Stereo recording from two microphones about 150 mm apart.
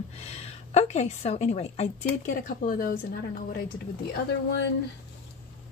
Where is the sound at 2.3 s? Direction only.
65° left (ahead or behind).